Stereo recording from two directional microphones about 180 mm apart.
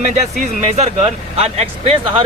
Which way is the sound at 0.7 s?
35° right (ahead or behind).